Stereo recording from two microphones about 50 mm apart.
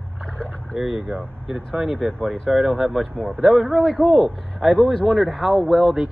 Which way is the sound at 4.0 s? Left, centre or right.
Right.